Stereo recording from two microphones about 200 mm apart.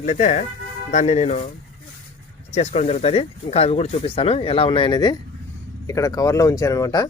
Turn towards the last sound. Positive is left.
turn(degrees=15)  # may be behind; listen again after turning